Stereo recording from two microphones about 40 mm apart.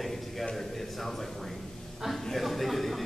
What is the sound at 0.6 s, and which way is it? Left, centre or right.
A man's voice, centre.